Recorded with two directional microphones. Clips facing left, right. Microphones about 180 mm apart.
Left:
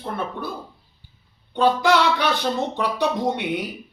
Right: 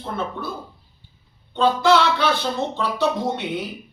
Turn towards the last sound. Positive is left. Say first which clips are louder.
# left 1 dB
turn(degrees=15)  # may be behind; listen again after turning